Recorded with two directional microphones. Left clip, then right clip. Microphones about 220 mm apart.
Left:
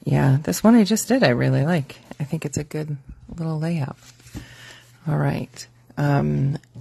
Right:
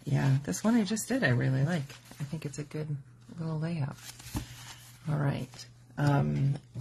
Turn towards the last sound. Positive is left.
turn(degrees=45)  # may be behind; listen again after turning